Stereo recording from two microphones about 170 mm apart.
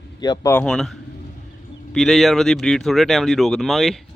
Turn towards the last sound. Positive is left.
turn(degrees=0)  # may be behind; listen again after turning